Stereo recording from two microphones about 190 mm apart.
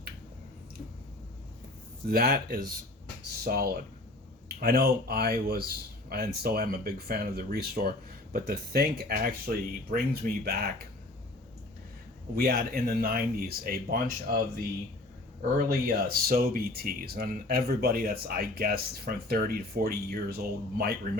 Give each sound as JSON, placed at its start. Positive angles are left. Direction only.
{"t": 2.0, "sound": "speech", "side_deg": -55}
{"t": 12.3, "sound": "speech", "side_deg": -55}
{"t": 15.4, "sound": "speech", "side_deg": -50}